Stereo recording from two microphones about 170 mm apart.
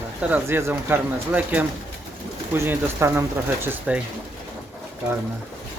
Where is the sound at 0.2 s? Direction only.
10° right (ahead or behind).